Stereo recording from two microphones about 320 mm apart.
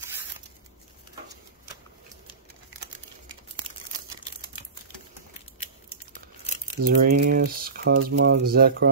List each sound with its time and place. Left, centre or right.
6.8 s speech: right